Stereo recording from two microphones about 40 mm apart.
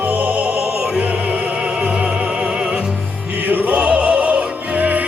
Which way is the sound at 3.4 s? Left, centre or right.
Right.